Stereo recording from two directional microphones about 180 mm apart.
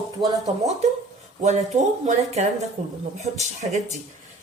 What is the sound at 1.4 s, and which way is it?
A woman's voice, 40° right (ahead or behind).